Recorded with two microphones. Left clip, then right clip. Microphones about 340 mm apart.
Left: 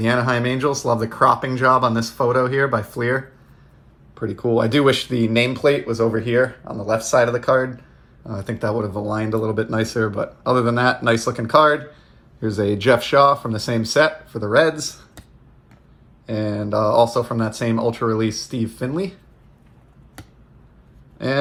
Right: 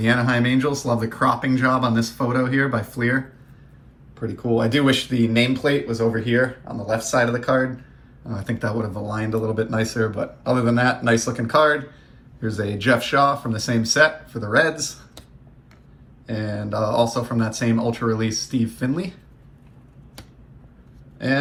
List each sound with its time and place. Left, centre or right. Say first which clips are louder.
0.0 s speech: left 1 dB; centre
8.3 s speech: left 3 dB; centre
16.2 s speech: left 4 dB; centre